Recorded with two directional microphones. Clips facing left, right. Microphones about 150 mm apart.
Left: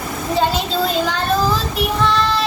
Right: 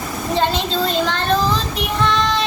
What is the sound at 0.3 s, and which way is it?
Child singing, 5° left (ahead or behind).